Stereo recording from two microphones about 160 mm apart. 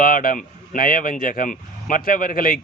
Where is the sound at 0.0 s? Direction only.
60° left (ahead or behind).